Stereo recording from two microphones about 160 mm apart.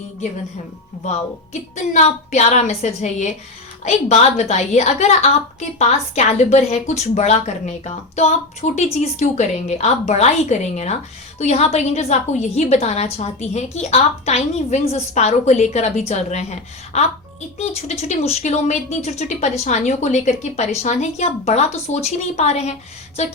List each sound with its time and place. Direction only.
1.7 s a woman's voice: 45° left (ahead or behind)